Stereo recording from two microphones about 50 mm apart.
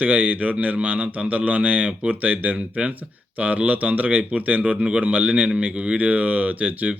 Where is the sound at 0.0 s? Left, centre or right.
Right.